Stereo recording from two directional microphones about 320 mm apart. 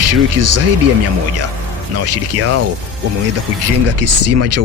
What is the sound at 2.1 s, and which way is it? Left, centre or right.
Speech, right.